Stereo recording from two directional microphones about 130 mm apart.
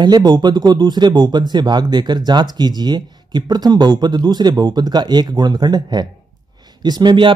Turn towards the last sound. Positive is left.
turn(degrees=-35)  # may be behind; listen again after turning